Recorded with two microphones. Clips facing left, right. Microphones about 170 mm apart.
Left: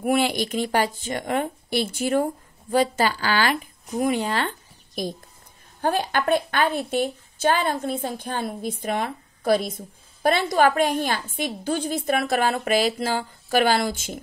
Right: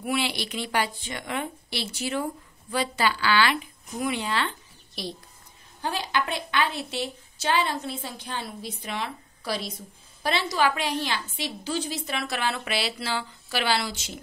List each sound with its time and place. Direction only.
0.0 s a woman's voice: 45° left (ahead or behind)